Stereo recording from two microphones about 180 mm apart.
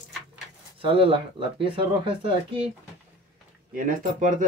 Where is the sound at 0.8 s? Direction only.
30° right (ahead or behind).